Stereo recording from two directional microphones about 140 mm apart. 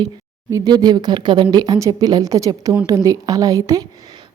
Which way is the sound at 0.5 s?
30° right (ahead or behind).